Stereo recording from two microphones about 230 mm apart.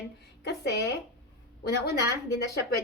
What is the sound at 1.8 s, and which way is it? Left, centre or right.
Speech, left.